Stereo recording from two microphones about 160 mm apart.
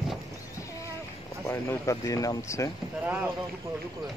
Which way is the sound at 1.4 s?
20° left (ahead or behind).